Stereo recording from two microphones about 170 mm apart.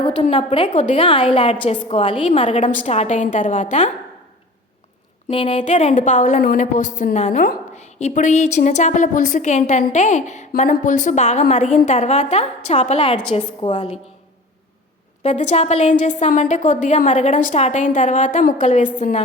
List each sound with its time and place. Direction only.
0.0 s a woman's voice: 30° left (ahead or behind)
2.4 s a woman's voice: 45° left (ahead or behind)
5.3 s a woman's voice: 30° left (ahead or behind)
15.2 s a woman's voice: 40° left (ahead or behind)